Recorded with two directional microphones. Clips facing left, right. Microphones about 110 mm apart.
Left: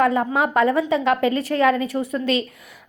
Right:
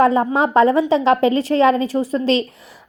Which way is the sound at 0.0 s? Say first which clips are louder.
Right 4 dB; 25° right (ahead or behind).